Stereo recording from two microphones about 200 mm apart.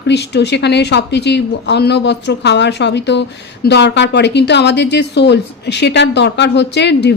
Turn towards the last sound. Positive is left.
turn(degrees=55)  # may be behind; listen again after turning